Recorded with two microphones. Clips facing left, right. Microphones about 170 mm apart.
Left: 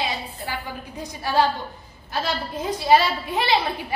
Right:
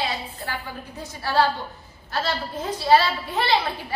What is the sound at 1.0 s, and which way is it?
A woman's voice, 15° left (ahead or behind).